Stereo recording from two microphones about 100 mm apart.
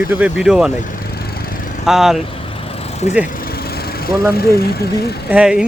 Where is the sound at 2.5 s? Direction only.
85° left.